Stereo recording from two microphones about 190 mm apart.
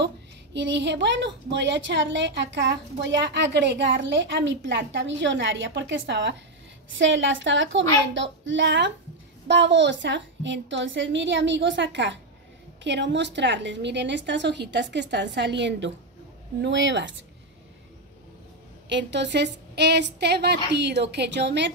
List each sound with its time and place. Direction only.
0.0 s a woman's voice: 70° right (ahead or behind)
6.9 s a woman's voice: 80° right
18.9 s a woman's voice: 70° right (ahead or behind)